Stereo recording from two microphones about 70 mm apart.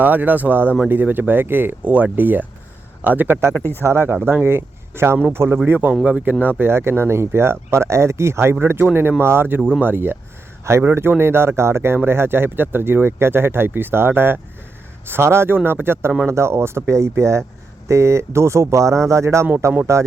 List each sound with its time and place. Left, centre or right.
0.0 s speech: right
3.5 s speech: left
3.8 s speech: right
5.6 s speech: right
10.7 s speech: right